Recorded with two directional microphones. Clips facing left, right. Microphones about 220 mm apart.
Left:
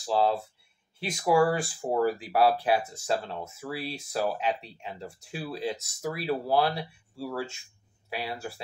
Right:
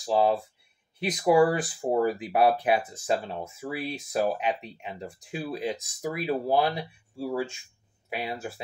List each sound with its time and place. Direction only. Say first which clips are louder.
0.0 s speech: right 2 dB; 15° right (ahead or behind)